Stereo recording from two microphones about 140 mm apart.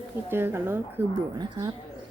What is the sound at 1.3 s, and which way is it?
Speech, 30° right (ahead or behind).